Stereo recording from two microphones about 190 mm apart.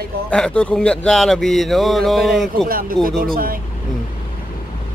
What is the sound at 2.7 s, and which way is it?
Speech, 50° right (ahead or behind).